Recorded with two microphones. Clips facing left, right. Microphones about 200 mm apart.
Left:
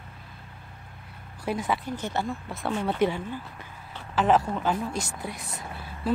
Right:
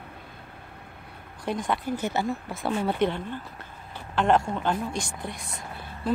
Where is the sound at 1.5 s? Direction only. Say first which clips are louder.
Even; 5° left (ahead or behind).